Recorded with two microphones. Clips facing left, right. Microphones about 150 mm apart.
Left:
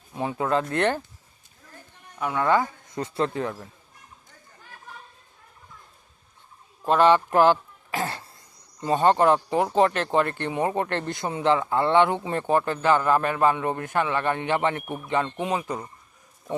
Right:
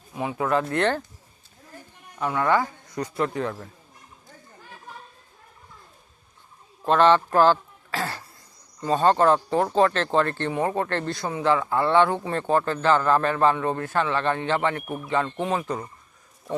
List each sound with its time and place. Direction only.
0.2 s speech: 30° left (ahead or behind)
0.7 s speech: 15° left (ahead or behind)
2.2 s speech: 20° left (ahead or behind)
6.8 s speech: 10° left (ahead or behind)